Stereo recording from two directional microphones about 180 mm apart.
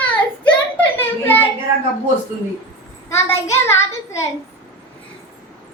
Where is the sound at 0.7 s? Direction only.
10° left (ahead or behind).